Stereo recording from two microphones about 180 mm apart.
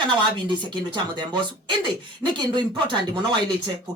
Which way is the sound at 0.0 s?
25° right (ahead or behind).